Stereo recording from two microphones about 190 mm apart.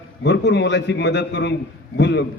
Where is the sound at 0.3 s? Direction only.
65° left (ahead or behind).